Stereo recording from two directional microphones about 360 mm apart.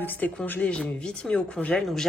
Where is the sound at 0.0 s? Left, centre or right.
Centre.